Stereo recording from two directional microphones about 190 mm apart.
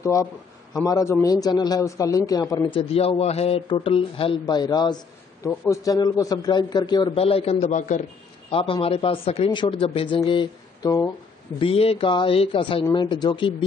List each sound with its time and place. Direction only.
0.0 s a man's voice: 15° left (ahead or behind); by 8.0 s 40° left (ahead or behind)
8.5 s a man's voice: 30° left (ahead or behind)
11.6 s a man's voice: 30° left (ahead or behind)